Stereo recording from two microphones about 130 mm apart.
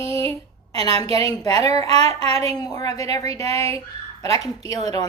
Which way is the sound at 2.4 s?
30° left (ahead or behind).